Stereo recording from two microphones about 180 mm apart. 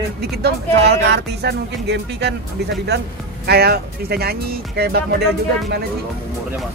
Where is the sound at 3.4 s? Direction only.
60° right (ahead or behind).